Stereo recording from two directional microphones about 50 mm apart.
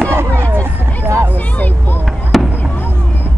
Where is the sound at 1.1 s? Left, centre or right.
Right.